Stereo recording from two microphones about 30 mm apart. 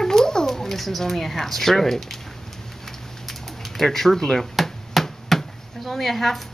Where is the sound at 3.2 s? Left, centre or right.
Centre.